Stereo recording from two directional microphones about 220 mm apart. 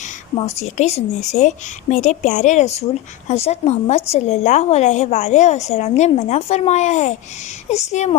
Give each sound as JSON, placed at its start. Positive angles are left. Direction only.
{"t": 0.0, "sound": "a woman's voice", "side_deg": 30}